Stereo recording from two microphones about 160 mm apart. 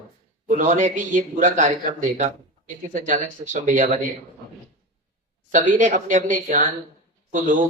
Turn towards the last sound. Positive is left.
turn(degrees=-55)  # may be behind; listen again after turning